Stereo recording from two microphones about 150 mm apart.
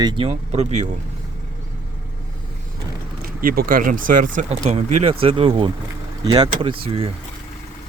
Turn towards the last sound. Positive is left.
turn(degrees=-40)  # may be behind; listen again after turning